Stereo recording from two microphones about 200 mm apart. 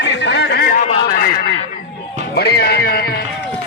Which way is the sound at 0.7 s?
40° left (ahead or behind).